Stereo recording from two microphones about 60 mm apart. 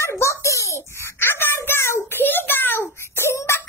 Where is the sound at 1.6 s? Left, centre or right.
Left.